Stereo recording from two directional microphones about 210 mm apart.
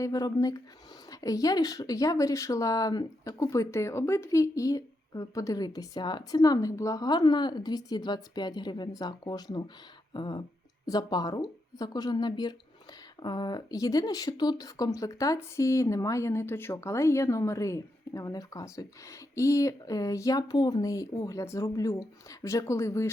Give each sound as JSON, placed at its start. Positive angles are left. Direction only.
{"t": 0.0, "sound": "speech", "side_deg": 15}